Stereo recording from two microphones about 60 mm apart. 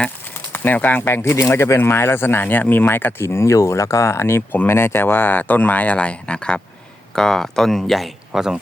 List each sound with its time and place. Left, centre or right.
0.5 s speech: left
3.2 s speech: left; by 8.5 s centre